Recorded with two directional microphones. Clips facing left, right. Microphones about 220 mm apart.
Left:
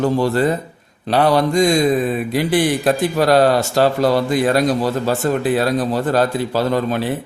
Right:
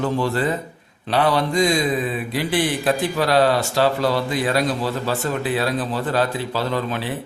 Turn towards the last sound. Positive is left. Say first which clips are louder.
# left 5 dB
turn(degrees=45)  # may be behind; listen again after turning